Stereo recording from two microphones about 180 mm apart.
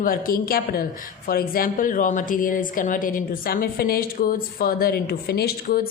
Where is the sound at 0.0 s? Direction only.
50° left (ahead or behind).